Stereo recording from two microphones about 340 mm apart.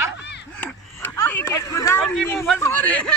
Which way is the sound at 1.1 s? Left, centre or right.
Centre.